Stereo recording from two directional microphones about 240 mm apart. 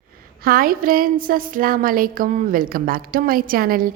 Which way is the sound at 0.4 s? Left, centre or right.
Right.